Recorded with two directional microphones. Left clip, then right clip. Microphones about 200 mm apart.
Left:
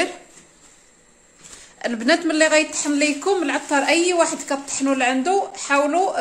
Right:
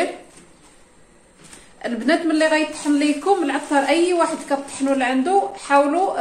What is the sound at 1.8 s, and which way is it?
A woman's voice, 65° left (ahead or behind).